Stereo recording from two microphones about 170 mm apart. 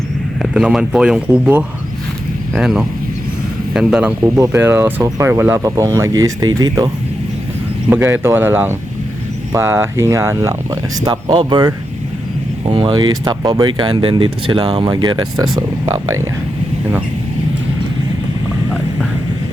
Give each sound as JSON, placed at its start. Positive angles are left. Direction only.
{"t": 0.4, "sound": "speech", "side_deg": -5}
{"t": 4.4, "sound": "speech", "side_deg": -15}